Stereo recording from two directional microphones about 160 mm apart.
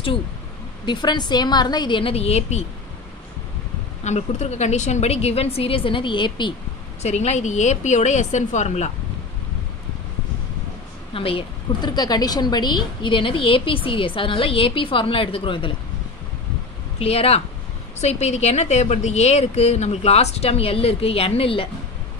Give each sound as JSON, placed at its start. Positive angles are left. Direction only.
{"t": 0.8, "sound": "a woman's voice", "side_deg": 25}
{"t": 4.0, "sound": "a woman's voice", "side_deg": 45}
{"t": 7.0, "sound": "a woman's voice", "side_deg": 45}
{"t": 11.1, "sound": "a woman's voice", "side_deg": 35}
{"t": 17.0, "sound": "a woman's voice", "side_deg": 40}